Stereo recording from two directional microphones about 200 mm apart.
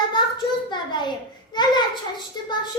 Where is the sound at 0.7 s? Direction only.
20° left (ahead or behind).